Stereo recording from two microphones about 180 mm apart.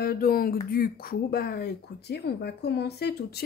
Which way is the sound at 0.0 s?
60° left (ahead or behind).